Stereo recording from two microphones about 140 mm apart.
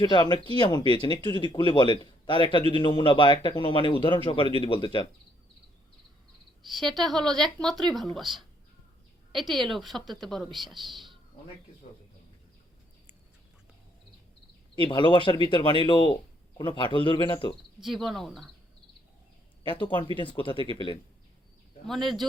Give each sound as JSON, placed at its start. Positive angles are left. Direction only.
{"t": 0.0, "sound": "speech", "side_deg": 30}
{"t": 6.7, "sound": "speech", "side_deg": 0}
{"t": 14.8, "sound": "speech", "side_deg": 35}
{"t": 17.8, "sound": "speech", "side_deg": 0}
{"t": 19.6, "sound": "speech", "side_deg": 35}
{"t": 21.8, "sound": "speech", "side_deg": 0}